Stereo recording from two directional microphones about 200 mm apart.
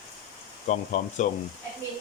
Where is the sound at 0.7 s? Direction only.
35° left (ahead or behind).